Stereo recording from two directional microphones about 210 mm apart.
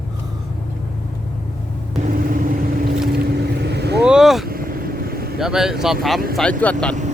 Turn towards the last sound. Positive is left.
turn(degrees=5)  # may be behind; listen again after turning